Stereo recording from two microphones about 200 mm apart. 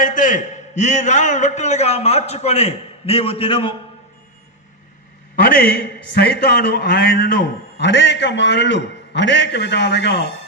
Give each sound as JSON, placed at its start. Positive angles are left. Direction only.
{"t": 0.0, "sound": "a man's voice", "side_deg": 40}
{"t": 5.5, "sound": "a man's voice", "side_deg": 50}